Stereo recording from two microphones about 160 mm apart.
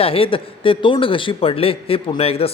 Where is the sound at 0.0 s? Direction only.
35° left (ahead or behind).